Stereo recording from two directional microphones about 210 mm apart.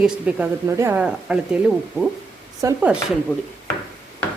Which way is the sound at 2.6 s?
15° right (ahead or behind).